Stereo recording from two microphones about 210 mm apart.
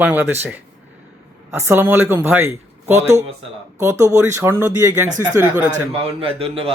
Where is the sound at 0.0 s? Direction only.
10° right (ahead or behind).